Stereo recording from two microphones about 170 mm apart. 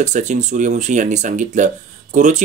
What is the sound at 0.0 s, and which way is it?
Speech, 45° right (ahead or behind).